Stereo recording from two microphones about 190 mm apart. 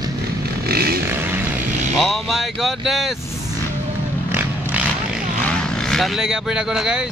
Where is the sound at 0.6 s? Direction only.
55° right (ahead or behind).